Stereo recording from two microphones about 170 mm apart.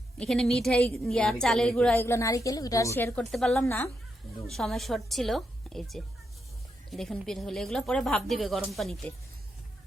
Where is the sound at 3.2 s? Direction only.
Centre (ahead or behind).